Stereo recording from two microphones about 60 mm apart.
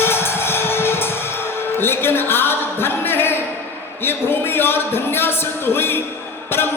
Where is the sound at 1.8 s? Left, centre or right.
Left.